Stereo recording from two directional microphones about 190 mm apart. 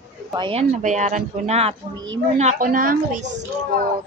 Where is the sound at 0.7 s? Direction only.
40° right (ahead or behind).